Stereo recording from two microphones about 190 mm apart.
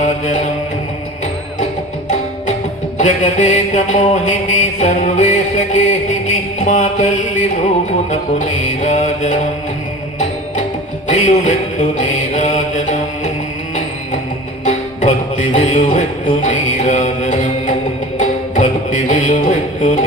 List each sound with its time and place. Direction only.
0.0 s mantra: 40° left (ahead or behind)
3.0 s mantra: 40° left (ahead or behind)
11.1 s mantra: 40° left (ahead or behind)
14.6 s music: 40° left (ahead or behind)